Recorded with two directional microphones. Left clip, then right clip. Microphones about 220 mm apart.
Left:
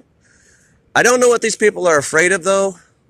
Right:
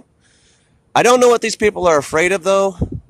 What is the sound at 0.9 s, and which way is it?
Speech, 15° right (ahead or behind).